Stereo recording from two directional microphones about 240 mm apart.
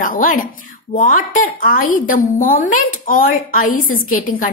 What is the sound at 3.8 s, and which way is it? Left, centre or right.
Speech, left.